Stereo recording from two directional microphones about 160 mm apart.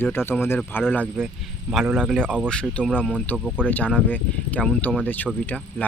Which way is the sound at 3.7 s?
10° left (ahead or behind).